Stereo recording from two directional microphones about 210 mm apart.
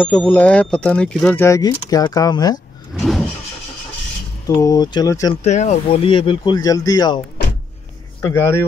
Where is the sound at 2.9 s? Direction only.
Centre (ahead or behind).